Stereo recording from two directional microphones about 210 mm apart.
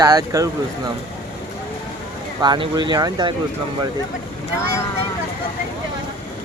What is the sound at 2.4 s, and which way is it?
Speech, 20° right (ahead or behind).